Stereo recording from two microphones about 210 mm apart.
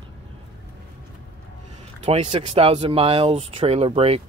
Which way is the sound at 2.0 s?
30° right (ahead or behind).